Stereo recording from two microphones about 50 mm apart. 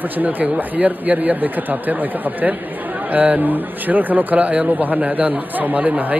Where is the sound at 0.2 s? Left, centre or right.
Right.